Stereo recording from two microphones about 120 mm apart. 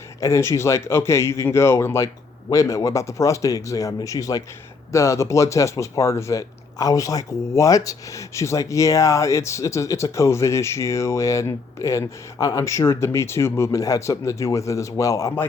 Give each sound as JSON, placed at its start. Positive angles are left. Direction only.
{"t": 0.2, "sound": "speech", "side_deg": 25}